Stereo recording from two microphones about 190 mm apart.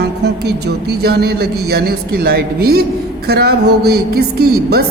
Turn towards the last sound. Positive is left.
turn(degrees=-55)  # may be behind; listen again after turning